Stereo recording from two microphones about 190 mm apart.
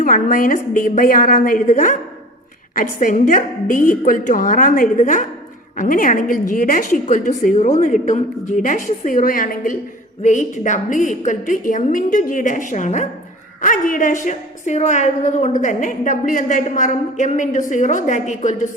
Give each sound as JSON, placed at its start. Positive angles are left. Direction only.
{"t": 0.0, "sound": "a woman's voice", "side_deg": 45}